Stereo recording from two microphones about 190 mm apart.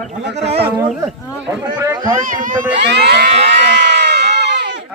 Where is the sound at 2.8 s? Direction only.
65° right (ahead or behind).